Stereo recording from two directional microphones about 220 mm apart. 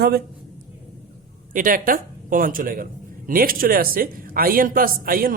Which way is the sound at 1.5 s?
40° right (ahead or behind).